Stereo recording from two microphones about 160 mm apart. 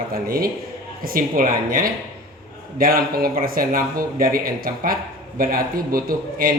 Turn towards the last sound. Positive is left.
turn(degrees=-65)  # may be behind; listen again after turning